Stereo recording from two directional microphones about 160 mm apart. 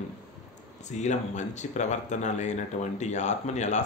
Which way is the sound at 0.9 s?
45° left (ahead or behind).